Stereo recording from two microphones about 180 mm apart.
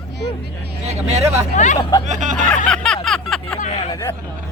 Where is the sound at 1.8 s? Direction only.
20° left (ahead or behind).